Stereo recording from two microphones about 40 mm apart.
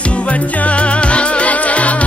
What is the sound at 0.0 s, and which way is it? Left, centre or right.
Music, left.